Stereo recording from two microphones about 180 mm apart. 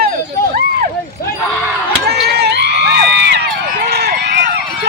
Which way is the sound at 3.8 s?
65° right (ahead or behind).